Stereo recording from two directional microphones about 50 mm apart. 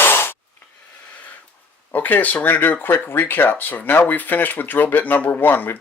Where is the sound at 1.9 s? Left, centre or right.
Left.